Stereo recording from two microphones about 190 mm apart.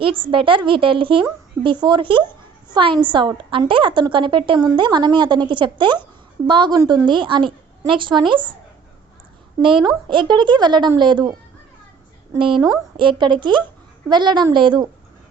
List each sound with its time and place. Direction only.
0.0 s a woman's voice: 30° right (ahead or behind)
9.6 s a woman's voice: 25° right (ahead or behind)
12.6 s a woman's voice: 25° right (ahead or behind)